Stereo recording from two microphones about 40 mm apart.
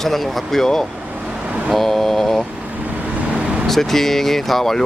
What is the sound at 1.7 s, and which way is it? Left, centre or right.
Mantra, centre.